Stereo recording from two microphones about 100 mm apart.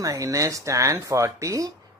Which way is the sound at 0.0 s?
35° right (ahead or behind).